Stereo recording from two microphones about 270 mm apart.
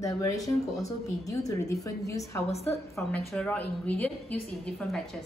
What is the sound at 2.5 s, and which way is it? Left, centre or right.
Speech, left.